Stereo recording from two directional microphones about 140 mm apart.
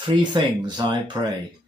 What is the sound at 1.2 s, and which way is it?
Speech, 20° right (ahead or behind).